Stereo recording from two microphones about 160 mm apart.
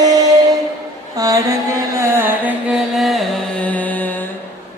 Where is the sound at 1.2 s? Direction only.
20° right (ahead or behind).